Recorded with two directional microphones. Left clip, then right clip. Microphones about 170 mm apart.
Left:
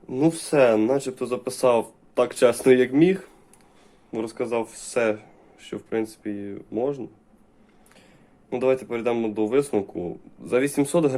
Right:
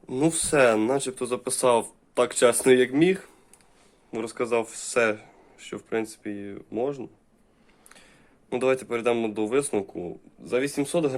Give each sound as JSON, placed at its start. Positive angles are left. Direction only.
{"t": 0.1, "sound": "speech", "side_deg": -25}
{"t": 8.4, "sound": "speech", "side_deg": -25}